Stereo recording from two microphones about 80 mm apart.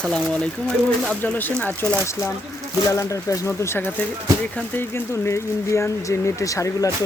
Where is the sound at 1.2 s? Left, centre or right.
Left.